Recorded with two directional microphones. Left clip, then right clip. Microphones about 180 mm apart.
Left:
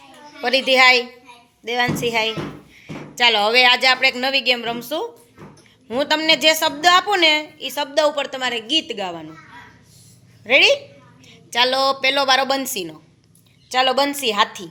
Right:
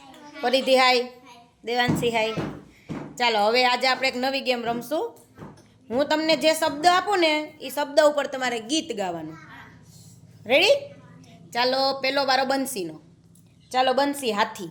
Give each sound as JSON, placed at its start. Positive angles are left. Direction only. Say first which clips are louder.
{"t": 0.4, "sound": "a woman's voice", "louder": "left 5 dB", "side_deg": -10}
{"t": 10.4, "sound": "a woman's voice", "louder": "left 5 dB", "side_deg": -10}